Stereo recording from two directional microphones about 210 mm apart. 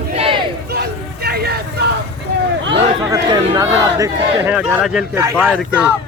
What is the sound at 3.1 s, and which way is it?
Speech, 15° right (ahead or behind).